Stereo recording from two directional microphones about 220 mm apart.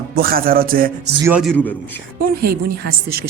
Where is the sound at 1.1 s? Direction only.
10° right (ahead or behind).